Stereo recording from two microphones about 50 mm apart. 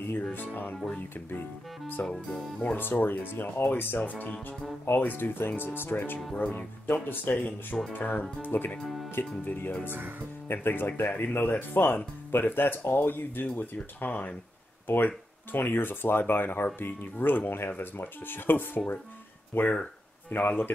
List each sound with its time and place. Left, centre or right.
0.2 s speech: left
2.0 s speech: centre
2.6 s speech: left
4.0 s speech: left
8.8 s speech: centre
9.4 s speech: left
19.6 s speech: left
20.2 s speech: left